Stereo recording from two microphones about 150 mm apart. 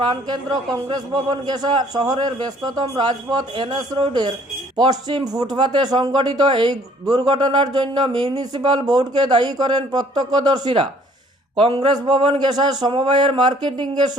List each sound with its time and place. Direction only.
0.1 s a man's voice: 30° right (ahead or behind)